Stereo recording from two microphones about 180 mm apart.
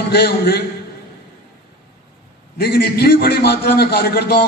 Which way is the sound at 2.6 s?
60° left (ahead or behind).